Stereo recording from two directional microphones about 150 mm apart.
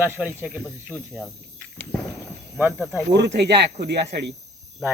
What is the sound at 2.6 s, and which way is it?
Speech, 10° right (ahead or behind).